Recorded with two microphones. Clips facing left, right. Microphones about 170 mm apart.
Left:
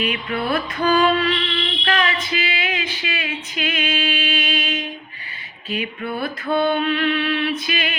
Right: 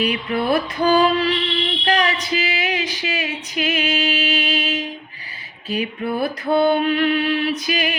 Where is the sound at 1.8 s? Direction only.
35° right (ahead or behind).